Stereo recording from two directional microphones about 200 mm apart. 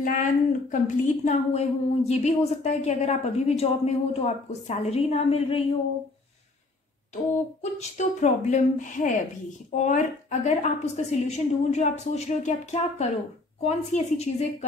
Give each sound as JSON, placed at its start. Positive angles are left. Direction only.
{"t": 0.0, "sound": "a woman's voice", "side_deg": 40}
{"t": 7.8, "sound": "a woman's voice", "side_deg": 35}